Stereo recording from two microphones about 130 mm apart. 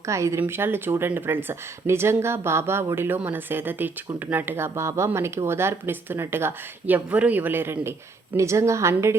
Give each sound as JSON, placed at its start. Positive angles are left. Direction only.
{"t": 0.1, "sound": "a woman's voice", "side_deg": -20}